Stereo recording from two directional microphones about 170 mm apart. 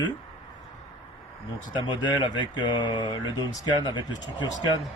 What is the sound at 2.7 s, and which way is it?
Speech, 25° left (ahead or behind).